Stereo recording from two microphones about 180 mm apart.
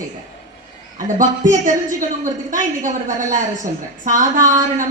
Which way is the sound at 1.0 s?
45° right (ahead or behind).